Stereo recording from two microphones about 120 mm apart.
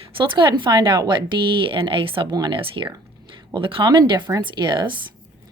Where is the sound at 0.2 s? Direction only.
40° right (ahead or behind).